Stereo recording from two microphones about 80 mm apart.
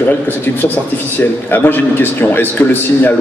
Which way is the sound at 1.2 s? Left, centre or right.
Left.